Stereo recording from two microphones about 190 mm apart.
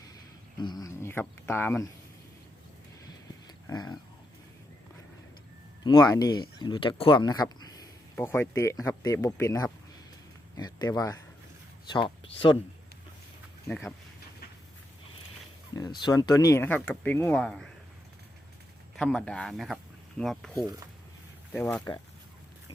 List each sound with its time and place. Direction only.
0.6 s speech: 20° left (ahead or behind)
3.4 s a sound: 20° left (ahead or behind)
5.8 s speech: 20° left (ahead or behind)
13.7 s speech: 10° left (ahead or behind)
15.7 s speech: 20° left (ahead or behind); by 17.7 s 5° left (ahead or behind)
18.9 s speech: 5° left (ahead or behind)
21.5 s speech: 10° left (ahead or behind)